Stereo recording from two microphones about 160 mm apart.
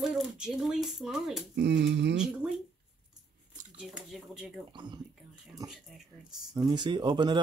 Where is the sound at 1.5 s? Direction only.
90° right.